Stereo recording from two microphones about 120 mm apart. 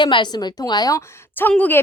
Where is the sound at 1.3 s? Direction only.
15° left (ahead or behind).